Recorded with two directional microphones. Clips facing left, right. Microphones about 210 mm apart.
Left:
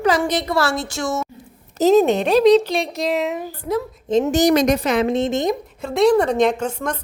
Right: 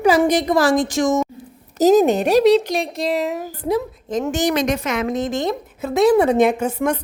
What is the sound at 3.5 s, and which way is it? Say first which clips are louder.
Speech: right 2 dB; 15° right (ahead or behind).